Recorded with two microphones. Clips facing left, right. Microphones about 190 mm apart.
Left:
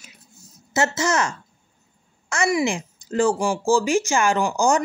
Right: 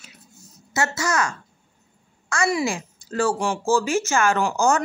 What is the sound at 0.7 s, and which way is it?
A woman's voice, 20° left (ahead or behind).